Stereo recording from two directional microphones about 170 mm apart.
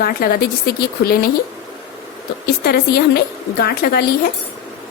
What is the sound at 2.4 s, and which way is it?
A woman's voice, 70° left (ahead or behind).